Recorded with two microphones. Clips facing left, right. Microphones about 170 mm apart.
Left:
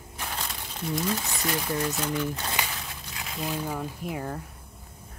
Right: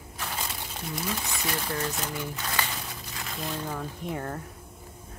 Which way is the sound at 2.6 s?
15° left (ahead or behind).